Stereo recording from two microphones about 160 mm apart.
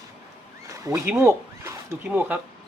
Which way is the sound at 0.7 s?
20° right (ahead or behind).